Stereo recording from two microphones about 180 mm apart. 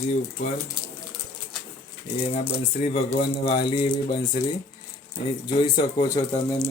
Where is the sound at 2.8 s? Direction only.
35° left (ahead or behind).